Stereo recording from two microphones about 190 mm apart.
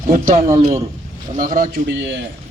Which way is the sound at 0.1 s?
40° right (ahead or behind).